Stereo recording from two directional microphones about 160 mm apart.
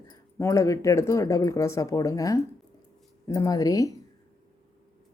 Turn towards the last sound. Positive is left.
turn(degrees=20)  # may be behind; listen again after turning